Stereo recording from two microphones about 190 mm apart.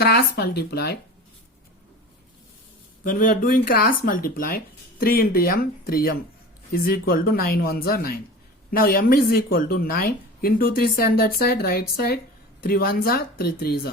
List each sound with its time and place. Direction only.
0.0 s speech: 55° left (ahead or behind)
3.0 s a woman's voice: 45° left (ahead or behind)